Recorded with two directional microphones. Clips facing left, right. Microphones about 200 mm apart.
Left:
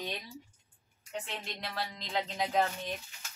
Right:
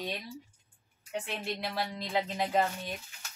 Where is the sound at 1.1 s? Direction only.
10° right (ahead or behind).